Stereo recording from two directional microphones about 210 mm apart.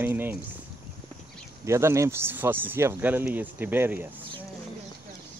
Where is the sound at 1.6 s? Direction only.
15° right (ahead or behind).